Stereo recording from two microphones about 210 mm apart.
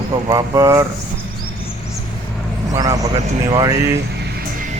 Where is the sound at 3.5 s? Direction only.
20° right (ahead or behind).